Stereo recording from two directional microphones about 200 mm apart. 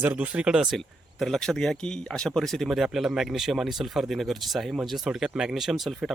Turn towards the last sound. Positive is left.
turn(degrees=0)  # may be behind; listen again after turning